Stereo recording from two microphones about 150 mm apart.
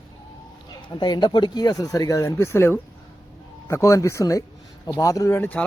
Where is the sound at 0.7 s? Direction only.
30° left (ahead or behind).